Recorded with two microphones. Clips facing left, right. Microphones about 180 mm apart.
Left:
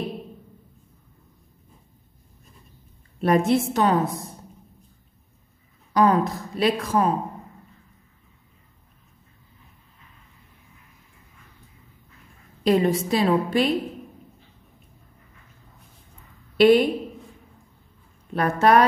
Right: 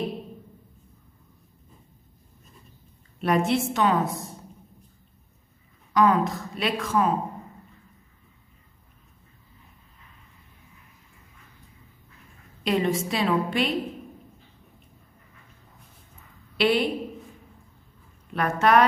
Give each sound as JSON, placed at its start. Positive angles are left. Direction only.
{"t": 3.2, "sound": "speech", "side_deg": 40}
{"t": 5.9, "sound": "speech", "side_deg": 35}
{"t": 12.6, "sound": "speech", "side_deg": 40}
{"t": 16.5, "sound": "a woman's voice", "side_deg": 45}
{"t": 18.3, "sound": "speech", "side_deg": 35}